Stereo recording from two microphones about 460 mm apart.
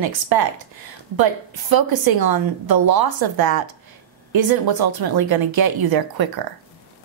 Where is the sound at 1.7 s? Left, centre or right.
Right.